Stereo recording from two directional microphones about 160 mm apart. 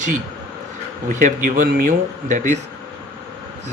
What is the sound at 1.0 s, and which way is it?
Speech, 55° right (ahead or behind).